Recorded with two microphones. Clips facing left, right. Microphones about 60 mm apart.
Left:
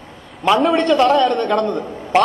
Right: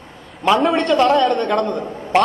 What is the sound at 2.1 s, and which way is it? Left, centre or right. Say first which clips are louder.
Speech: left 1 dB; centre.